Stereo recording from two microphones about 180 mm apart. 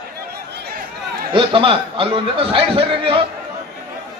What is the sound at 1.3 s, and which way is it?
Speech, 30° right (ahead or behind).